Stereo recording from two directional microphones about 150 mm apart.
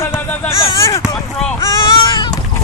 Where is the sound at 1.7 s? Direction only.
30° left (ahead or behind).